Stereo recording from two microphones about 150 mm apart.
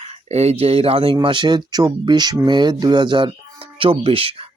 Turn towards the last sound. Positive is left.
turn(degrees=-35)  # may be behind; listen again after turning